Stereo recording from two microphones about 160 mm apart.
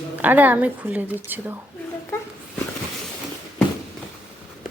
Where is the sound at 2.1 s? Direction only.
15° left (ahead or behind).